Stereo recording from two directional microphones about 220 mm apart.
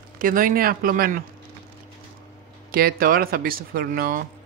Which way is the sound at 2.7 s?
40° right (ahead or behind).